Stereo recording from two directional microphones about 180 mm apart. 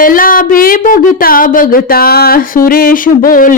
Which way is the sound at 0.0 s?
50° left (ahead or behind).